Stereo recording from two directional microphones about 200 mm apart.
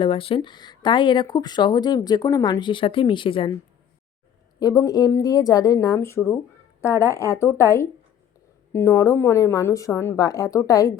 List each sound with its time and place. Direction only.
0.0 s speech: 25° left (ahead or behind)
4.6 s a woman's voice: 20° left (ahead or behind)